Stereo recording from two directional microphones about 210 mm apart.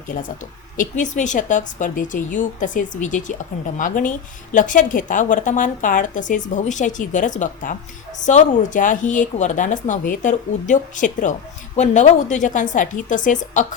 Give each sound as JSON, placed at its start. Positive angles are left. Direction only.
{"t": 0.1, "sound": "a woman's voice", "side_deg": 40}